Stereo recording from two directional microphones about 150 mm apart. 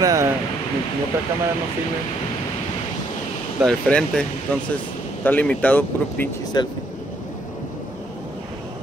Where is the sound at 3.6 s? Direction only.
5° left (ahead or behind).